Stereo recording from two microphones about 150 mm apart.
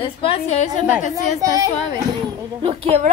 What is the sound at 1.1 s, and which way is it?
Speech, 25° right (ahead or behind).